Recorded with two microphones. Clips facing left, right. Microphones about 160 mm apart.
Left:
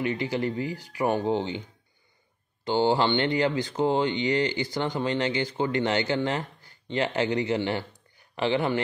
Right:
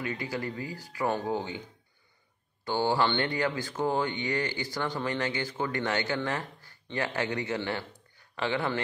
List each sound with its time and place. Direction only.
0.0 s speech: 25° left (ahead or behind)
2.6 s speech: 20° left (ahead or behind)